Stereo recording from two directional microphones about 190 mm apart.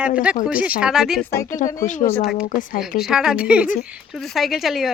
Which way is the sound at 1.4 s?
45° left (ahead or behind).